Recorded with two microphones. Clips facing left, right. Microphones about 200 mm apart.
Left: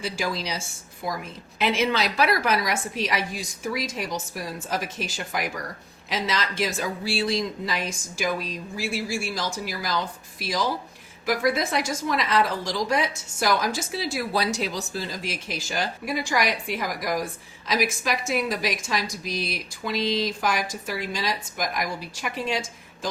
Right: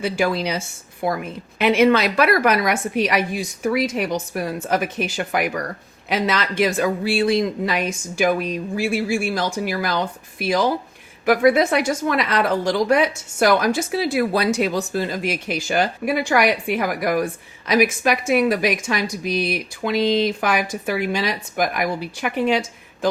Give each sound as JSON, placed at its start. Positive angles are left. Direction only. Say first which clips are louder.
{"t": 0.0, "sound": "a woman's voice", "louder": "right 8 dB", "side_deg": -60}